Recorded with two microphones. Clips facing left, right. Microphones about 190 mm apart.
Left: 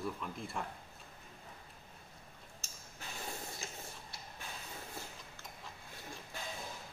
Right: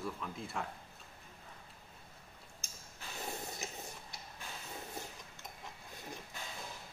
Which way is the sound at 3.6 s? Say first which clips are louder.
Right 2 dB; 20° right (ahead or behind).